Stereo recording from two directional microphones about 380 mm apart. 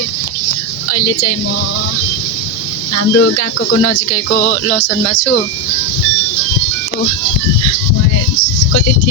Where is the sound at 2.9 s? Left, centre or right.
Left.